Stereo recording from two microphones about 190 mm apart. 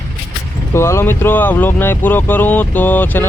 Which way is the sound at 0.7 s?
15° left (ahead or behind).